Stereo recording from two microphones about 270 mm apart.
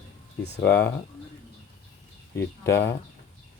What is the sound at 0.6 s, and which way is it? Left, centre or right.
Speech, centre.